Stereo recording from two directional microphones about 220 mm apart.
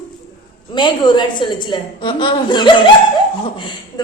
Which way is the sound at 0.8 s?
20° left (ahead or behind).